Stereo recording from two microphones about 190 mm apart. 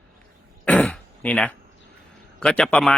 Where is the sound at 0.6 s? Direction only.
5° left (ahead or behind).